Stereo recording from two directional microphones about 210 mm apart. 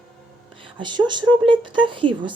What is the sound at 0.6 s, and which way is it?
Speech, 25° right (ahead or behind).